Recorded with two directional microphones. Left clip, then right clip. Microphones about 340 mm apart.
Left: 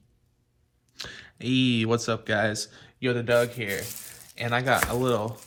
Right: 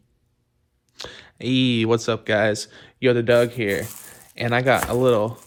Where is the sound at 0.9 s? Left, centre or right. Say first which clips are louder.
Right 3 dB; centre.